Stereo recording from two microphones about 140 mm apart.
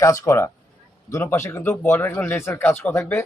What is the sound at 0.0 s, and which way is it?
Speech, 20° left (ahead or behind).